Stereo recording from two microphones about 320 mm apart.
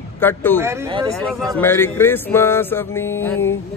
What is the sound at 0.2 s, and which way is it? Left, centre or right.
Music, centre.